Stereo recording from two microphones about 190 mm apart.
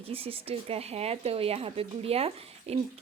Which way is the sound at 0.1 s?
30° right (ahead or behind).